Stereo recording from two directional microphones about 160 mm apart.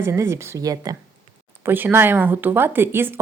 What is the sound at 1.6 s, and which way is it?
Speech, 15° right (ahead or behind).